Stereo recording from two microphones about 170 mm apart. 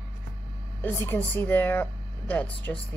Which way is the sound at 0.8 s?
10° left (ahead or behind).